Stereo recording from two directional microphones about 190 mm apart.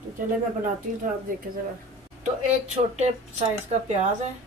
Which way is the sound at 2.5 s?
35° right (ahead or behind).